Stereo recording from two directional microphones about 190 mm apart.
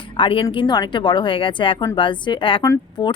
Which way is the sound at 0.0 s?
25° left (ahead or behind).